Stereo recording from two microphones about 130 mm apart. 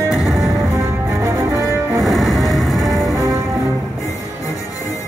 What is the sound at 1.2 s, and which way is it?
Cello, 20° right (ahead or behind).